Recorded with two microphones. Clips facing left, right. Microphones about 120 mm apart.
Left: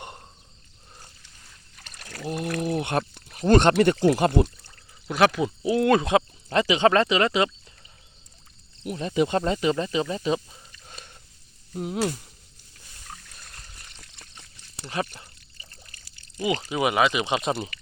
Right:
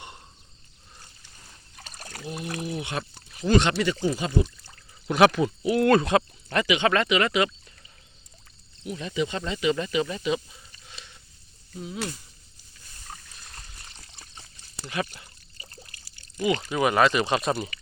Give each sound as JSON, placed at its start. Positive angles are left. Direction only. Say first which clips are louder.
{"t": 1.9, "sound": "a sound", "louder": "right 1 dB", "side_deg": -35}
{"t": 2.2, "sound": "pour", "louder": "left 5 dB", "side_deg": 55}
{"t": 3.2, "sound": "speech", "louder": "left 3 dB", "side_deg": 55}
{"t": 5.0, "sound": "speech", "louder": "right 2 dB", "side_deg": 0}
{"t": 5.6, "sound": "speech", "louder": "even", "side_deg": 20}
{"t": 8.9, "sound": "speech", "louder": "left 5 dB", "side_deg": 45}
{"t": 11.7, "sound": "speech", "louder": "left 7 dB", "side_deg": 60}
{"t": 13.8, "sound": "a sound", "louder": "right 1 dB", "side_deg": -35}
{"t": 15.0, "sound": "speech", "louder": "left 1 dB", "side_deg": 35}
{"t": 16.6, "sound": "speech", "louder": "right 1 dB", "side_deg": 15}